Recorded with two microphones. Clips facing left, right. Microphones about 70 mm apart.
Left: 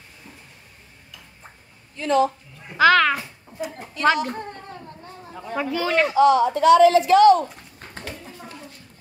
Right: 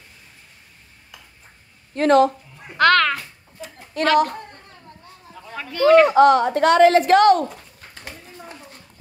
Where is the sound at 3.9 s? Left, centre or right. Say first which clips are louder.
Left 2 dB; right.